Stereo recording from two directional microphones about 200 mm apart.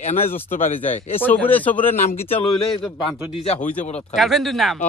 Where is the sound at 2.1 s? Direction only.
30° left (ahead or behind).